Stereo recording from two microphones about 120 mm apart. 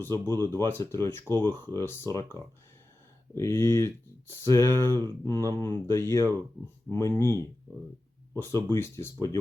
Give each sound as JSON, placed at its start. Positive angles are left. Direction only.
{"t": 0.0, "sound": "speech", "side_deg": 20}